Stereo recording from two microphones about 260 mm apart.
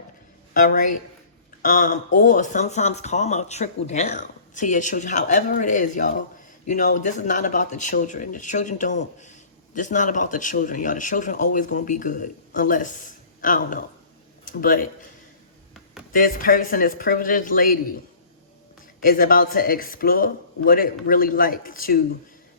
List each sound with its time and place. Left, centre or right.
0.5 s speech: left
16.1 s speech: left
19.0 s speech: left